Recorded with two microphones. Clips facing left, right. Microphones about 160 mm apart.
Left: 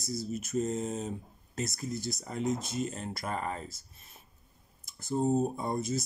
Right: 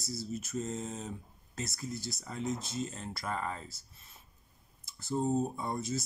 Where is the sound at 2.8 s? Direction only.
60° left (ahead or behind).